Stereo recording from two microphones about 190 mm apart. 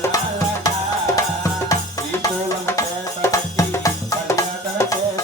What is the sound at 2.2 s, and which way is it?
Music, 15° left (ahead or behind).